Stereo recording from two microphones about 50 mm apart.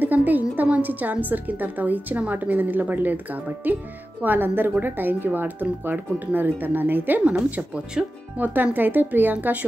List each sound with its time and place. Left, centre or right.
0.0 s a woman's voice: right
8.0 s speech: centre
8.4 s speech: right
8.7 s a woman's voice: right